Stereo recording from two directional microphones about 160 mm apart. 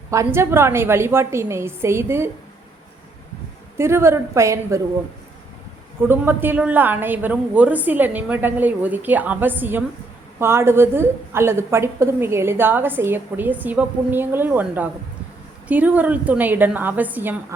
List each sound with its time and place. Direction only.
0.1 s a woman's voice: 15° right (ahead or behind)
3.8 s a woman's voice: 15° right (ahead or behind)
6.0 s a woman's voice: 15° right (ahead or behind)